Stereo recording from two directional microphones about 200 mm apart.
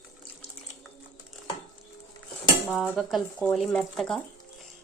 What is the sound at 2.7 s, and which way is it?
Speech, 5° right (ahead or behind).